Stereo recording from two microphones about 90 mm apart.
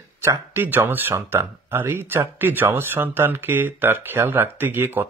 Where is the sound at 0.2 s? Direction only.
30° right (ahead or behind).